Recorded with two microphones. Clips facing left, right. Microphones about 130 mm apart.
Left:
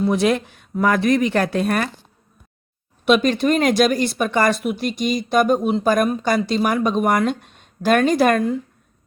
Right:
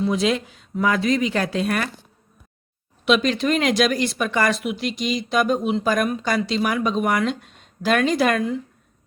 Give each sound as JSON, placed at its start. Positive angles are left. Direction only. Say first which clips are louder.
{"t": 0.1, "sound": "speech", "louder": "left 3 dB", "side_deg": 55}
{"t": 3.2, "sound": "speech", "louder": "left 3 dB", "side_deg": 45}